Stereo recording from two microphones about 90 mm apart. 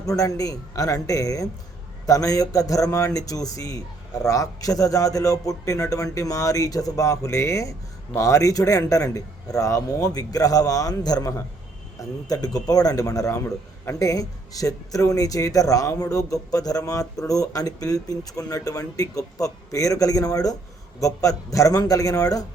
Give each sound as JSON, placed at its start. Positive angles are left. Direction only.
{"t": 0.0, "sound": "a man's voice", "side_deg": 40}